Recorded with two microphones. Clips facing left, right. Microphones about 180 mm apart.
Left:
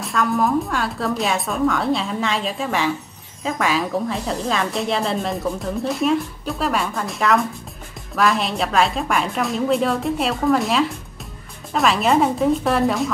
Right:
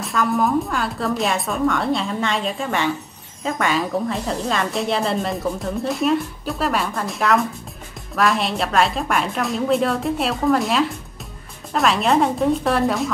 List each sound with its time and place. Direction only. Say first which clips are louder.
0.0 s a woman's voice: even; centre (ahead or behind)